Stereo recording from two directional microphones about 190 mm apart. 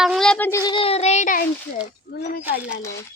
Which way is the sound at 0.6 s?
25° left (ahead or behind).